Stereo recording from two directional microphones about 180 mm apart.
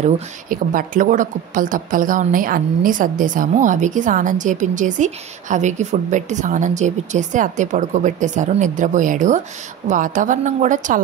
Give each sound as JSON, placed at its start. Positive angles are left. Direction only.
{"t": 0.0, "sound": "a woman's voice", "side_deg": -50}